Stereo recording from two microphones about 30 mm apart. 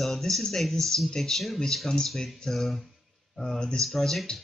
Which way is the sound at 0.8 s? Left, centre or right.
Centre.